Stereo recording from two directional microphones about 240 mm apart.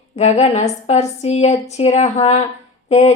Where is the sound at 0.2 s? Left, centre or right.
Left.